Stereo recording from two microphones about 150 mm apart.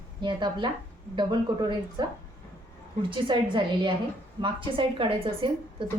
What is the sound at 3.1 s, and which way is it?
A woman's voice, 30° right (ahead or behind).